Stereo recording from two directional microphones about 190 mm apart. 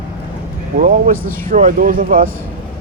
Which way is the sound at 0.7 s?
45° right (ahead or behind).